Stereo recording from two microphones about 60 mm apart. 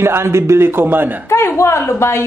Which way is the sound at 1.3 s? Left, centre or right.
Left.